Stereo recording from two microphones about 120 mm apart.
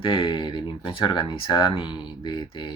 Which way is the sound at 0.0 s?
45° left (ahead or behind).